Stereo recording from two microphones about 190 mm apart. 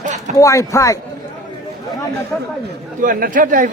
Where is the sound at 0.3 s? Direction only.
15° left (ahead or behind).